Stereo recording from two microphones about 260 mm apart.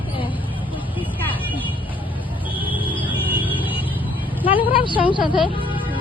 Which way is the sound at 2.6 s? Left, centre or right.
Centre.